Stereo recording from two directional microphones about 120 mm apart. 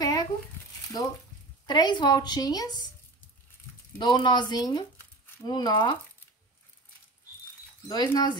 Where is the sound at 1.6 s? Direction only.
35° left (ahead or behind).